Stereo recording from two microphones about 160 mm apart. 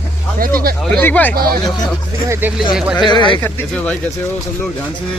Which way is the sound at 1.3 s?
70° right (ahead or behind).